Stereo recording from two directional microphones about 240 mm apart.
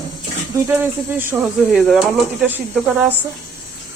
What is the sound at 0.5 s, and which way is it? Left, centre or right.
Speech, centre.